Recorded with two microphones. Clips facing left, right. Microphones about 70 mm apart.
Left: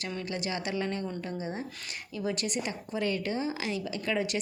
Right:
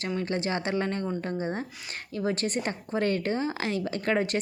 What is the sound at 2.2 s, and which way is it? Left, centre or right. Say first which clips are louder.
A woman's voice: right 4 dB; right.